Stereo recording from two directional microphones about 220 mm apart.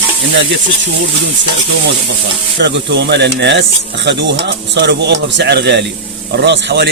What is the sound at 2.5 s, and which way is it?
Speech, 50° right (ahead or behind).